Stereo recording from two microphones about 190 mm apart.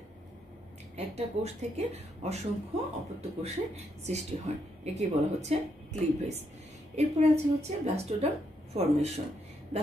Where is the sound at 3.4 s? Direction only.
35° right (ahead or behind).